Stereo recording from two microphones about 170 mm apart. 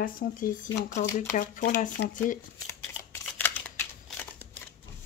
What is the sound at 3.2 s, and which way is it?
Scissors, 10° left (ahead or behind).